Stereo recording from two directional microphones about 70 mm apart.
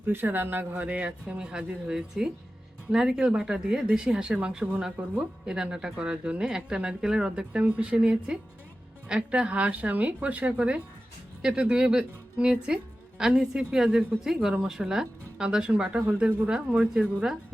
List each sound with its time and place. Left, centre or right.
0.0 s speech: right